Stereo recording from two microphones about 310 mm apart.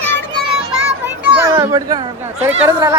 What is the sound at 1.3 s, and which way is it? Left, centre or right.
Speech, centre.